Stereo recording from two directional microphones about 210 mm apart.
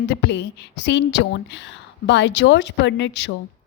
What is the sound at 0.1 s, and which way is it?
Speech, 55° left (ahead or behind).